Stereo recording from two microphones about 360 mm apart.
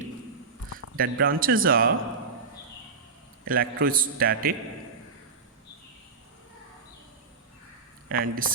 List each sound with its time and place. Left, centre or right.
0.7 s speech: right
3.4 s a man's voice: right
8.1 s a man's voice: right